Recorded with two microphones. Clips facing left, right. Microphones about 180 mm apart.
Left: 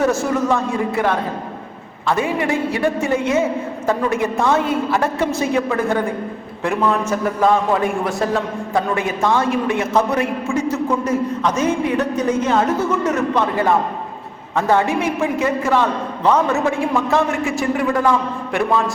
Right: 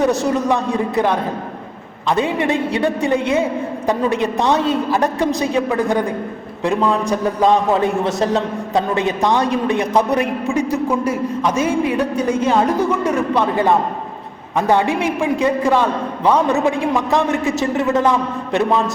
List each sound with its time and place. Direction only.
0.0 s a man's voice: 20° right (ahead or behind)
2.0 s a man's voice: 20° right (ahead or behind)